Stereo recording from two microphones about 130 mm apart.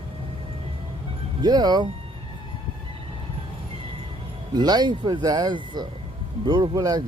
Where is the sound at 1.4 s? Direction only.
30° right (ahead or behind).